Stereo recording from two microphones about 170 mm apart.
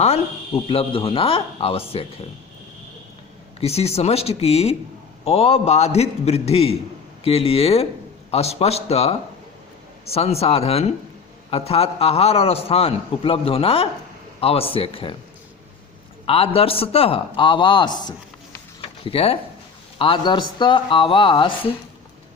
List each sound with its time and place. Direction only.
0.0 s a man's voice: 35° left (ahead or behind)
3.6 s a man's voice: 35° left (ahead or behind)
16.2 s a man's voice: 35° left (ahead or behind)